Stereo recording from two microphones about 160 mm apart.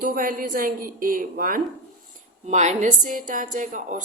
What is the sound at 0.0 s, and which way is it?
Speech, 60° right (ahead or behind).